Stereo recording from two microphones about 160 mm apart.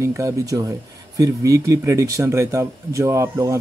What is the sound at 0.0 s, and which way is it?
Speech, 20° right (ahead or behind).